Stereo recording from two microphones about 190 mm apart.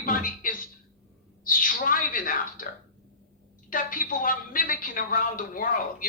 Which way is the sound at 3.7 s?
45° left (ahead or behind).